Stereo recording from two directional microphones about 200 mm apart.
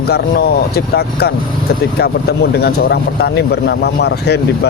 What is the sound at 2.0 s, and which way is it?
Speech, 55° left (ahead or behind).